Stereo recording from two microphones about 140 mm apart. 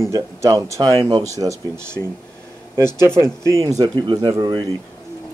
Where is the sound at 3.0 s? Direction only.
20° right (ahead or behind).